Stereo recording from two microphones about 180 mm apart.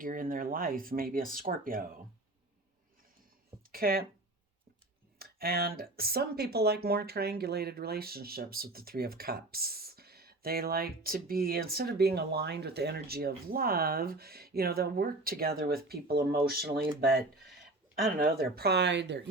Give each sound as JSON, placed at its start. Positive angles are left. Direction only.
{"t": 0.0, "sound": "speech", "side_deg": -50}
{"t": 3.7, "sound": "speech", "side_deg": -55}
{"t": 5.2, "sound": "speech", "side_deg": -55}
{"t": 18.2, "sound": "speech", "side_deg": -60}